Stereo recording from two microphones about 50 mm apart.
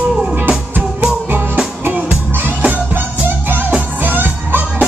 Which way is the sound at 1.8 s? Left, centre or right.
Right.